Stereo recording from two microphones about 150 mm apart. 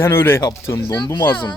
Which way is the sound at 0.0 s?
15° left (ahead or behind).